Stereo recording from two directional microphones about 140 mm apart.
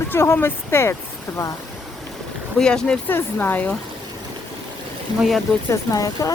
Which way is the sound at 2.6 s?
5° left (ahead or behind).